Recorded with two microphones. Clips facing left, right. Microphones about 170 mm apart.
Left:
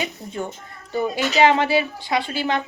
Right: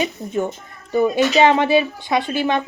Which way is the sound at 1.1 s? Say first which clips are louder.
Right 1 dB; 20° right (ahead or behind).